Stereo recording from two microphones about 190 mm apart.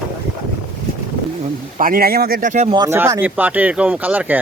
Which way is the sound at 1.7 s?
50° right (ahead or behind).